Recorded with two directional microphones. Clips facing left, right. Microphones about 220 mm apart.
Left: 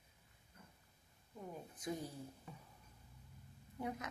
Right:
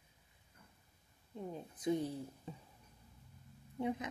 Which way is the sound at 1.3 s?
25° right (ahead or behind).